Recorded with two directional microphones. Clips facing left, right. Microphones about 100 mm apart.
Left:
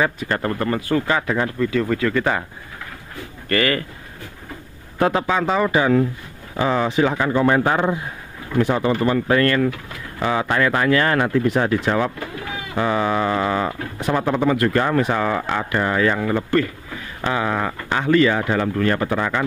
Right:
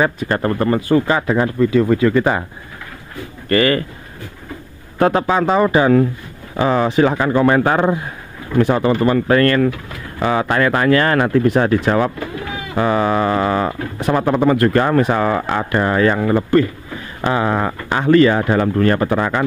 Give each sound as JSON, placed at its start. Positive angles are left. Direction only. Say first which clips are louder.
{"t": 0.0, "sound": "speech", "louder": "right 4 dB", "side_deg": -35}
{"t": 3.4, "sound": "speech", "louder": "right 5 dB", "side_deg": -30}
{"t": 4.9, "sound": "a man's voice", "louder": "right 4 dB", "side_deg": -50}
{"t": 5.2, "sound": "speech", "louder": "right 4 dB", "side_deg": -40}
{"t": 16.3, "sound": "speech", "louder": "right 5 dB", "side_deg": -25}
{"t": 17.3, "sound": "a sound", "louder": "right 4 dB", "side_deg": -35}
{"t": 17.9, "sound": "speech", "louder": "right 5 dB", "side_deg": -45}